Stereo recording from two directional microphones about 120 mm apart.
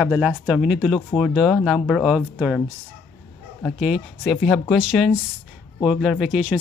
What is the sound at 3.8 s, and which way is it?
Speech, centre (ahead or behind).